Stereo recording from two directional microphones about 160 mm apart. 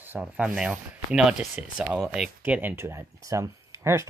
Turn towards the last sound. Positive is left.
turn(degrees=-20)  # may be behind; listen again after turning